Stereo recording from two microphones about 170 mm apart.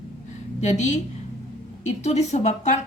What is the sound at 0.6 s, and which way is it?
Speech, 45° left (ahead or behind).